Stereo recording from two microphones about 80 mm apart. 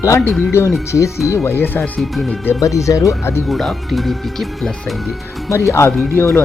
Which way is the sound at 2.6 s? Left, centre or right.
Left.